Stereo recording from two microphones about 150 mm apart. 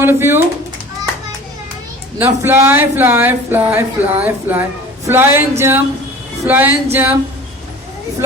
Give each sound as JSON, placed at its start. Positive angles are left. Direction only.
{"t": 0.0, "sound": "speech", "side_deg": -15}
{"t": 2.1, "sound": "speech", "side_deg": -15}